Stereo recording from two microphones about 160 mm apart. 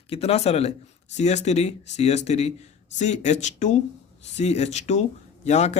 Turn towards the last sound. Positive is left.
turn(degrees=45)  # may be behind; listen again after turning